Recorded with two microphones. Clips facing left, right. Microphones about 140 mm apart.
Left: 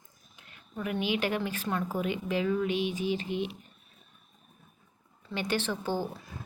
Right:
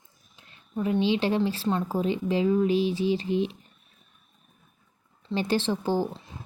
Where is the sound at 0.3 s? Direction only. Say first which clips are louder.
Right 7 dB; 30° right (ahead or behind).